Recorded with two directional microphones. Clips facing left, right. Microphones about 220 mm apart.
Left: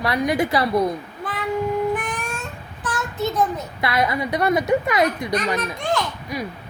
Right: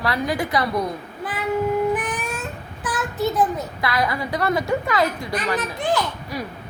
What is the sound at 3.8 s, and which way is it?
A woman's voice, 25° left (ahead or behind).